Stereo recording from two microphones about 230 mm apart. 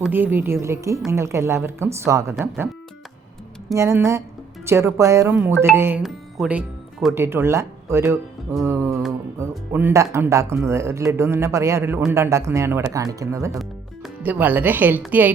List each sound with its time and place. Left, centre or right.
0.0 s speech: centre
3.7 s speech: centre
13.6 s speech: centre